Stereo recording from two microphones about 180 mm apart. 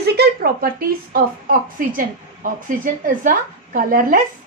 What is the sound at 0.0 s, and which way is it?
A woman's voice, 65° right (ahead or behind).